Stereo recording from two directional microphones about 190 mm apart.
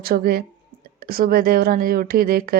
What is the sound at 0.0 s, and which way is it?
Speech, 50° right (ahead or behind).